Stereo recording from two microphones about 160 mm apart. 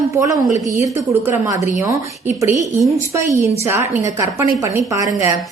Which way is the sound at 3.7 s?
15° right (ahead or behind).